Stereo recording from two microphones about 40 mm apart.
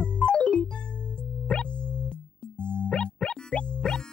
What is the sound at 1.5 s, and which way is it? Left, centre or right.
Music, left.